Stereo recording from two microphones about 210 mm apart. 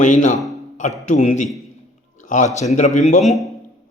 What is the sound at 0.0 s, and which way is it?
Mantra, 35° left (ahead or behind).